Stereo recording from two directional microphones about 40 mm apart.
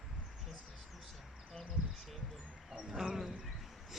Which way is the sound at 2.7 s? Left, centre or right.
Centre.